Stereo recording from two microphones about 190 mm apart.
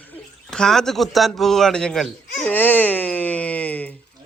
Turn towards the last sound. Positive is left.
turn(degrees=10)  # may be behind; listen again after turning